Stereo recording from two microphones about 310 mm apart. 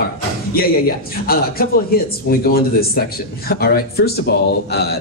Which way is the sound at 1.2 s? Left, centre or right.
Left.